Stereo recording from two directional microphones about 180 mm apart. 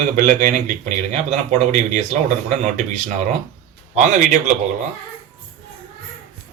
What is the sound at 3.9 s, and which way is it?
Speech, 45° right (ahead or behind).